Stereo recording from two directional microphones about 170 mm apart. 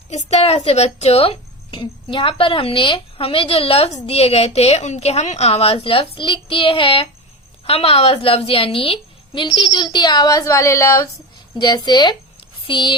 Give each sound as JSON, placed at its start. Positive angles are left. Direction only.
{"t": 0.1, "sound": "a woman's voice", "side_deg": 40}